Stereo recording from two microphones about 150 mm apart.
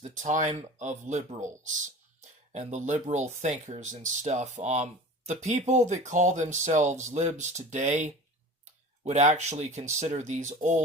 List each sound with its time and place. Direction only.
0.0 s speech: 55° right (ahead or behind)